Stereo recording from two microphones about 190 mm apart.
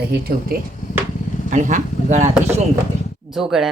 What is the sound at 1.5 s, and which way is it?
Speech, 40° right (ahead or behind).